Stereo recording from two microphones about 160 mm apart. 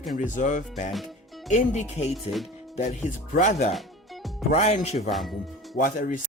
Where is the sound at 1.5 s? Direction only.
50° left (ahead or behind).